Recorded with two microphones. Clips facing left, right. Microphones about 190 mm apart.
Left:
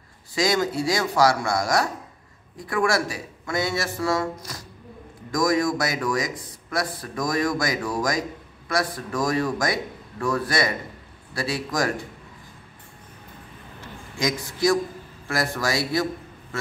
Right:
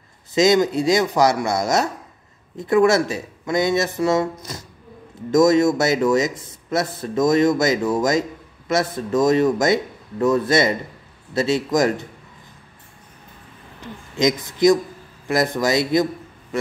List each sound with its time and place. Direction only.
0.3 s speech: 20° right (ahead or behind)
14.1 s speech: 20° right (ahead or behind)